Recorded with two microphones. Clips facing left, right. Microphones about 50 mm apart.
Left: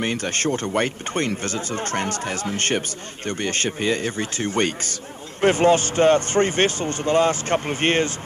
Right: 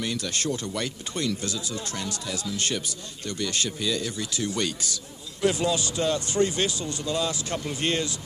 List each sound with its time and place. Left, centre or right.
0.0 s speech: left